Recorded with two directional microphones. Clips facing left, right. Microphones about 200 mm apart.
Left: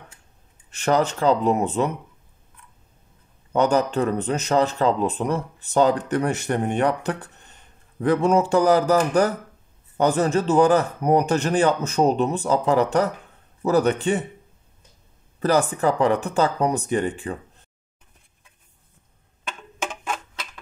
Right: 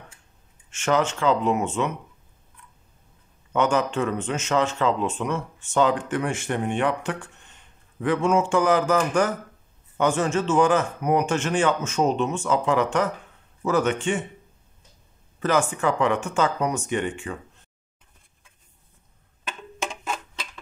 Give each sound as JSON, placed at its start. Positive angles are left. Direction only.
{"t": 0.7, "sound": "speech", "side_deg": 35}
{"t": 3.5, "sound": "speech", "side_deg": 35}
{"t": 15.4, "sound": "speech", "side_deg": 35}